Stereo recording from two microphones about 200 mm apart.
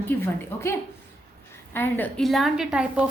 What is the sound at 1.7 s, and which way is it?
A woman's voice, 10° left (ahead or behind).